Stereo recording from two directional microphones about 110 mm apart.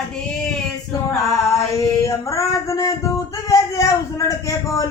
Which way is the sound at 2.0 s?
30° left (ahead or behind).